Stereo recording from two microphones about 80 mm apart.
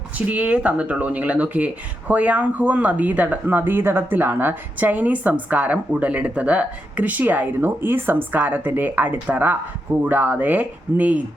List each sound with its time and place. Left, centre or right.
0.3 s speech: centre